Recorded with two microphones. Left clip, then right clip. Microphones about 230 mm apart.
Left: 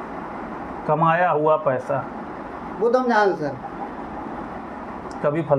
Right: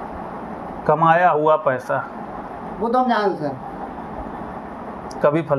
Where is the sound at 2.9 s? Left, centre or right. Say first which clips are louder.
Even; centre.